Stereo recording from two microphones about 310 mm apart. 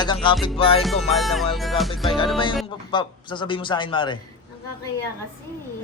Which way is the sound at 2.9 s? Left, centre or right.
Centre.